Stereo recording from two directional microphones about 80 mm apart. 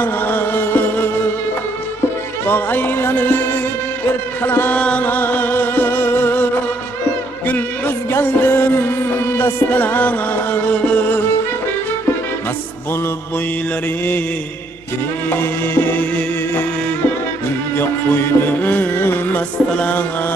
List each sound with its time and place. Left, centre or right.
0.0 s music: left
2.4 s speech: left
4.5 s music: left
4.7 s music: centre
15.2 s music: left
17.7 s music: left